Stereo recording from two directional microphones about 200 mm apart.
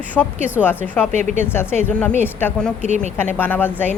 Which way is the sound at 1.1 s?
35° right (ahead or behind).